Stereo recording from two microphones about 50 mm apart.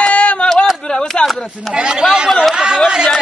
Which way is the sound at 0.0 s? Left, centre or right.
Left.